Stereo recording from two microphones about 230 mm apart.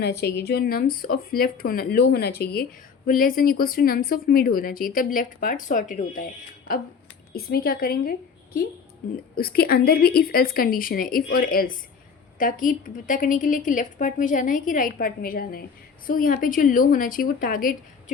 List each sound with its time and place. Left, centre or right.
0.0 s speech: left
7.3 s speech: left
9.3 s speech: left